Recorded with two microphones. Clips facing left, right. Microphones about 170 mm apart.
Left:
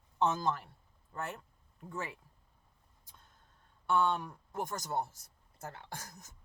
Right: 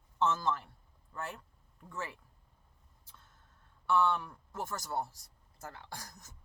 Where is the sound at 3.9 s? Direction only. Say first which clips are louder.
Right 1 dB; 15° left (ahead or behind).